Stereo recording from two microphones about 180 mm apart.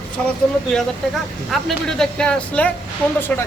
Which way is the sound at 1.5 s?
Centre (ahead or behind).